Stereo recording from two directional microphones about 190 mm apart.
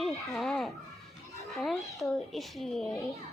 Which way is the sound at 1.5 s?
Centre (ahead or behind).